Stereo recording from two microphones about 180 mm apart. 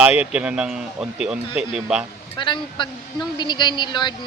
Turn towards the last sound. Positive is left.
turn(degrees=25)  # may be behind; listen again after turning